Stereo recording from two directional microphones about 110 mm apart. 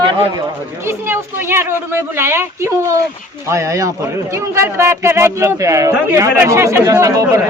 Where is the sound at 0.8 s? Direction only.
25° right (ahead or behind).